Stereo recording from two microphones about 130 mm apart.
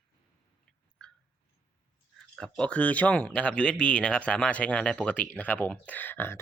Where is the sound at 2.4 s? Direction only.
10° left (ahead or behind).